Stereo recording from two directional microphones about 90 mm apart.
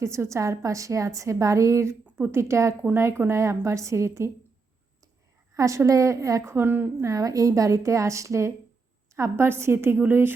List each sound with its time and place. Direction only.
0.0 s a woman's voice: 35° right (ahead or behind)
5.5 s a woman's voice: 35° right (ahead or behind)
7.0 s a woman's voice: 40° right (ahead or behind); by 10.3 s 25° right (ahead or behind)